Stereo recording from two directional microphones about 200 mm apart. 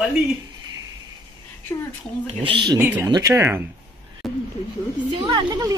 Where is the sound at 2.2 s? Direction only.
25° right (ahead or behind).